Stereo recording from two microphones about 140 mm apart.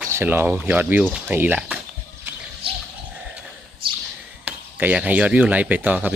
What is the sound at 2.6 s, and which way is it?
Bird, 40° right (ahead or behind).